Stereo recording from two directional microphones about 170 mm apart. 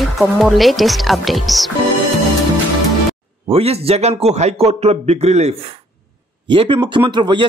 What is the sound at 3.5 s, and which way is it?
A man's voice, 35° right (ahead or behind).